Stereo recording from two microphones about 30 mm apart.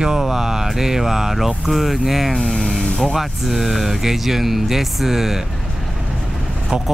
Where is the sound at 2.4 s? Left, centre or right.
Left.